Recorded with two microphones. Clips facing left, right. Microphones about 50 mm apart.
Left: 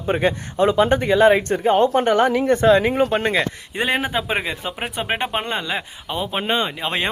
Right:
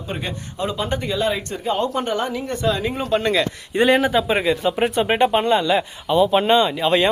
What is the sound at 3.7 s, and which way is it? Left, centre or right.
A man's voice, centre.